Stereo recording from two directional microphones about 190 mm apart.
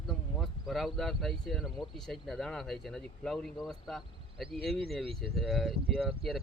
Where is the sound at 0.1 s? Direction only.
Centre (ahead or behind).